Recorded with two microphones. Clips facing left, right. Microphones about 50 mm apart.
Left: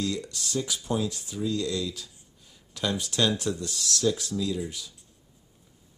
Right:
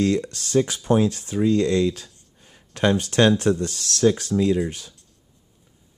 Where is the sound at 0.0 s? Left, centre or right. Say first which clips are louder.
Right 9 dB; right.